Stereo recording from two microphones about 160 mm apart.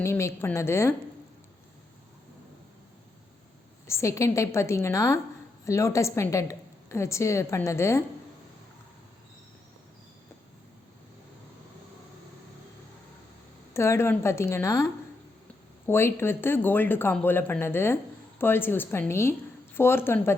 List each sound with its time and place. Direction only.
0.0 s speech: 15° left (ahead or behind)
3.8 s speech: 20° left (ahead or behind)
13.7 s speech: 15° left (ahead or behind)